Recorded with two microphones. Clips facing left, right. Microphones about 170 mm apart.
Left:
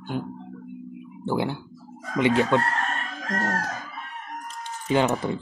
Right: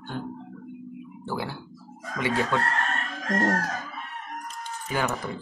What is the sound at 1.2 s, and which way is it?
Speech, 20° left (ahead or behind).